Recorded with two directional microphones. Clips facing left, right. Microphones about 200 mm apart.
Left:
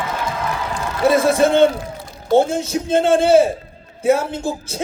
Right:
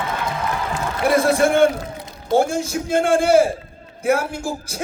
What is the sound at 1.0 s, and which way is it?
Speech, 20° left (ahead or behind).